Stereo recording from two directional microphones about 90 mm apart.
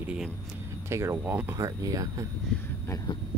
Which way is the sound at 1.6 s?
40° right (ahead or behind).